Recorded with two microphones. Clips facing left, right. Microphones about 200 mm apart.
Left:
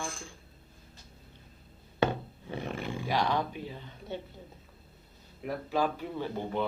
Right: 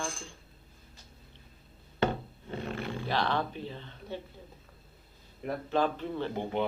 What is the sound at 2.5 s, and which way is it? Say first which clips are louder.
Roar: even; 15° left (ahead or behind).